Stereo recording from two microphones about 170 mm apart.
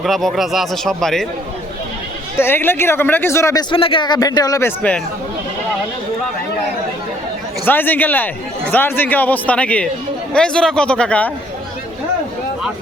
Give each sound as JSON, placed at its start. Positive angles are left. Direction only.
{"t": 0.0, "sound": "a man's voice", "side_deg": 0}
{"t": 2.3, "sound": "speech", "side_deg": 15}
{"t": 4.8, "sound": "speech", "side_deg": 5}
{"t": 7.6, "sound": "a man's voice", "side_deg": 10}